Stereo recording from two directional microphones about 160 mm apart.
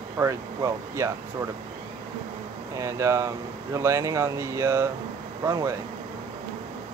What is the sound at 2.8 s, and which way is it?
Speech, 20° right (ahead or behind).